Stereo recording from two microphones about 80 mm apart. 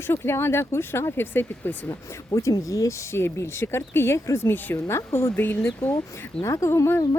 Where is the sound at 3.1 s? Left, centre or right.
Left.